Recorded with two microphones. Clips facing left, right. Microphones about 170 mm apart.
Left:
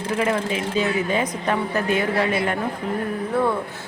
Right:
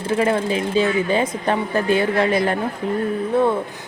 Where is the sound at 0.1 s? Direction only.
30° right (ahead or behind).